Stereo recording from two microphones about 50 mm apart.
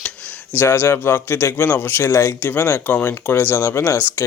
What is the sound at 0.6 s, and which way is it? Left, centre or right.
Speech, left.